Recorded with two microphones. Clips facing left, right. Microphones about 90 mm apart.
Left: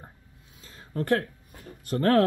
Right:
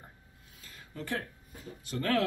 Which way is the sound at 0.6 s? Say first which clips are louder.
Left 3 dB; 30° left (ahead or behind).